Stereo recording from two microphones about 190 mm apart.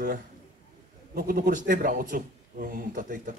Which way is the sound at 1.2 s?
50° right (ahead or behind).